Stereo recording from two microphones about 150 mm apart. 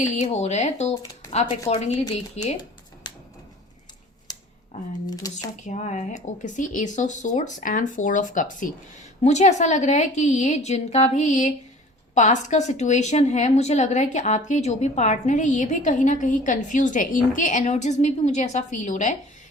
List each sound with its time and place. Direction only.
0.0 s a woman's voice: 50° left (ahead or behind)
5.0 s speech: 25° left (ahead or behind)
5.6 s speech: 50° left (ahead or behind)
9.2 s a woman's voice: 50° left (ahead or behind)